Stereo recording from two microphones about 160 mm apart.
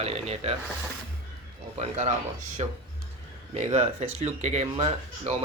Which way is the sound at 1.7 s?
45° right (ahead or behind).